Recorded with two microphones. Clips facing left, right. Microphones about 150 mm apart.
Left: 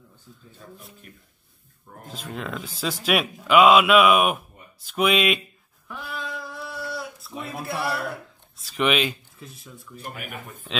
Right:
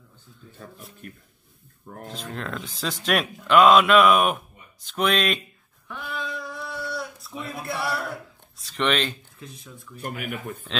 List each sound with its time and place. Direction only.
0.6 s speech: 60° right (ahead or behind)
2.0 s speech: centre (ahead or behind)
5.9 s a sound: 5° left (ahead or behind)
8.5 s speech: 5° left (ahead or behind)